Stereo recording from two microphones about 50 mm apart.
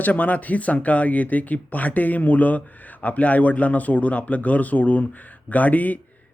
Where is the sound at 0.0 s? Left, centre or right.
Left.